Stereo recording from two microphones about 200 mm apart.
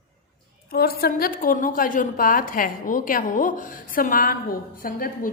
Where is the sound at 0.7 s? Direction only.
50° left (ahead or behind).